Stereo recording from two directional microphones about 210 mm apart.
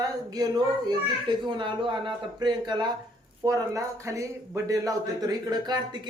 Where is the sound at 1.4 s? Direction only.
25° right (ahead or behind).